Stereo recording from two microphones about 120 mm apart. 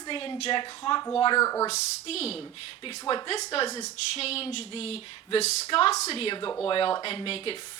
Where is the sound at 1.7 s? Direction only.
60° left (ahead or behind).